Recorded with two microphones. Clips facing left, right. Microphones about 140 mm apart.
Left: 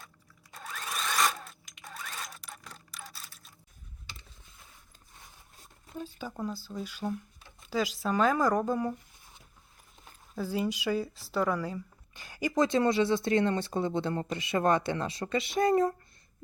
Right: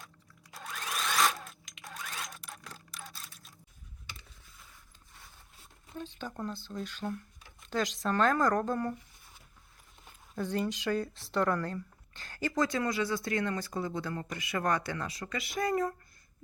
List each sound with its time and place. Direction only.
0.5 s zipper: centre (ahead or behind)
6.0 s speech: 5° left (ahead or behind)
10.3 s speech: 5° left (ahead or behind)
12.1 s speech: 15° left (ahead or behind)